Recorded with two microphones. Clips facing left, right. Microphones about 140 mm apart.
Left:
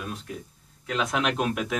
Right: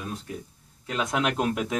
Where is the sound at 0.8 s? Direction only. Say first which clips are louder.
Even; 20° right (ahead or behind).